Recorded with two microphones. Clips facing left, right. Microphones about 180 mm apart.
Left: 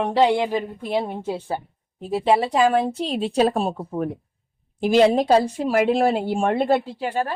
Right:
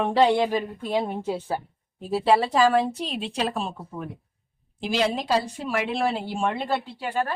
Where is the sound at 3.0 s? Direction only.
40° left (ahead or behind).